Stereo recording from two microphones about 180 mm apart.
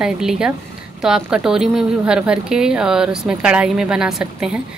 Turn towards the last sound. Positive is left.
turn(degrees=-5)  # may be behind; listen again after turning